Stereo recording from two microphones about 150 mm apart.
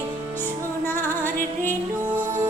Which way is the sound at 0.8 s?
15° left (ahead or behind).